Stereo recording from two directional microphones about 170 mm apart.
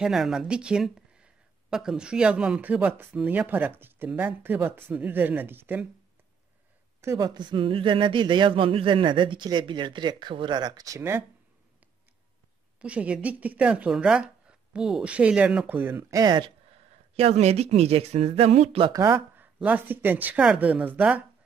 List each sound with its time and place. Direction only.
0.0 s speech: 5° right (ahead or behind)
7.0 s speech: 20° right (ahead or behind)
12.8 s speech: 5° right (ahead or behind); by 16.5 s 25° right (ahead or behind)
17.1 s speech: 40° right (ahead or behind)
18.9 s speech: 20° right (ahead or behind)